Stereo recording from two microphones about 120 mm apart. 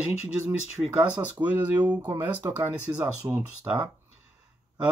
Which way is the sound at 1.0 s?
15° right (ahead or behind).